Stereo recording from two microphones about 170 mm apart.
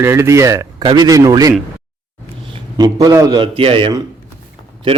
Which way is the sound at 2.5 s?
25° right (ahead or behind).